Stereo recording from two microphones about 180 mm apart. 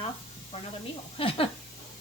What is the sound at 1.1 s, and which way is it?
Speech, 30° left (ahead or behind).